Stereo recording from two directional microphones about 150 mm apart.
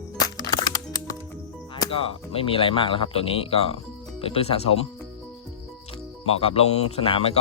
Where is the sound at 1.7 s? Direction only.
35° left (ahead or behind).